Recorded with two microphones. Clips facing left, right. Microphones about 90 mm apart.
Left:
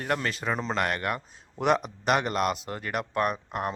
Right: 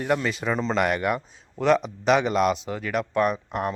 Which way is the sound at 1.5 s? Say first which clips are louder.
Right 4 dB; 10° left (ahead or behind).